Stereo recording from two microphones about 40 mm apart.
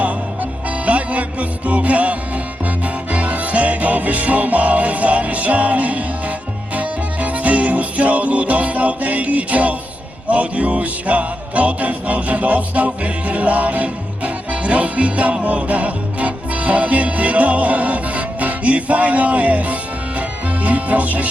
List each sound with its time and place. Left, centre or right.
0.9 s music: right